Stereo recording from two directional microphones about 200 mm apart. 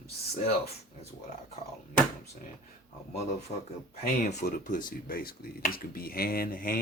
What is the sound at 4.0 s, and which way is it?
Speech, 40° left (ahead or behind).